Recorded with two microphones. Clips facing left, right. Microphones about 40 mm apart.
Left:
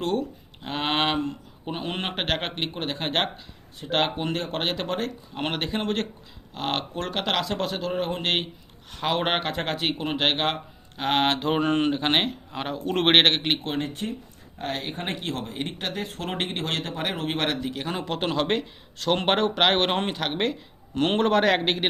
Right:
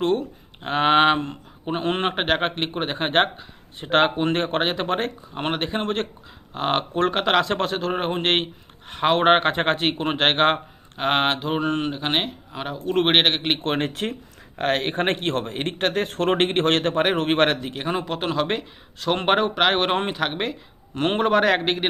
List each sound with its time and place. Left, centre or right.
0.0 s speech: right
4.6 s speech: centre
4.9 s speech: right
5.3 s speech: centre
7.4 s speech: right
10.9 s speech: right
11.3 s speech: centre
13.6 s speech: right
14.6 s speech: right
17.8 s speech: centre
20.9 s speech: centre